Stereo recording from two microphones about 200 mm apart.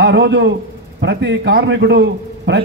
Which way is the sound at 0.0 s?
60° right (ahead or behind).